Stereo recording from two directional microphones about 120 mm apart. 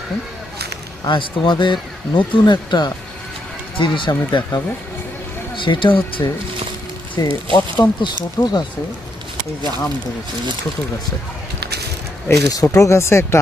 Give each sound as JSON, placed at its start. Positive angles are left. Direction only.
{"t": 1.0, "sound": "speech", "side_deg": 40}
{"t": 12.3, "sound": "speech", "side_deg": 30}